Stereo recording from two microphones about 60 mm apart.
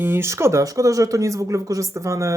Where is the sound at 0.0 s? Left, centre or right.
Right.